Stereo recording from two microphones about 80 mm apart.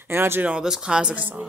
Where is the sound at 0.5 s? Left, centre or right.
Centre.